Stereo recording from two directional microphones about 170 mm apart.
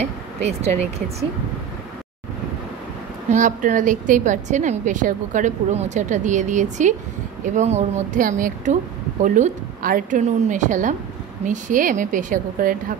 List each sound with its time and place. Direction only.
0.0 s speech: 40° right (ahead or behind)
3.3 s a woman's voice: 50° right (ahead or behind)